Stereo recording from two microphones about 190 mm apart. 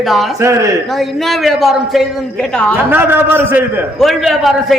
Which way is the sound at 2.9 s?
10° right (ahead or behind).